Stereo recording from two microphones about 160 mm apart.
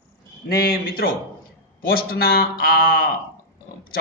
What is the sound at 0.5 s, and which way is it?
A man's voice, 75° left (ahead or behind).